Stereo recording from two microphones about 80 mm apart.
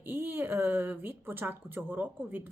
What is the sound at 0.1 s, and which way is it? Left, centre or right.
Speech, right.